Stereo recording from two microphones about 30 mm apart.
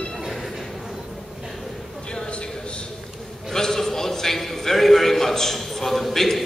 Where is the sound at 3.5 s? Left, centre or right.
Centre.